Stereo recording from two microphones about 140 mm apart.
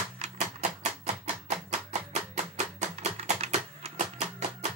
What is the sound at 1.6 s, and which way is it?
Music, 55° right (ahead or behind).